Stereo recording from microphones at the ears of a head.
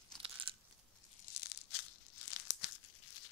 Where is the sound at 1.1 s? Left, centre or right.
Left.